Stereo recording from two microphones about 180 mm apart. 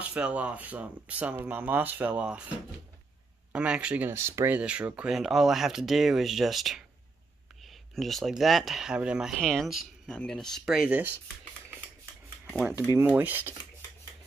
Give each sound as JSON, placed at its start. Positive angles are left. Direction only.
{"t": 0.0, "sound": "speech", "side_deg": -10}
{"t": 3.5, "sound": "speech", "side_deg": -5}
{"t": 12.5, "sound": "speech", "side_deg": -5}